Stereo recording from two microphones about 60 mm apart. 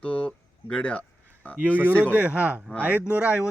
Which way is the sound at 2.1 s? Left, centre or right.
Right.